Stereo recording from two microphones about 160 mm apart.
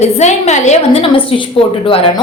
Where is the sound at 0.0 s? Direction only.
45° left (ahead or behind).